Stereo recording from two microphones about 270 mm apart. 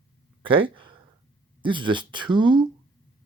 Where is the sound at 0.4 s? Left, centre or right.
Centre.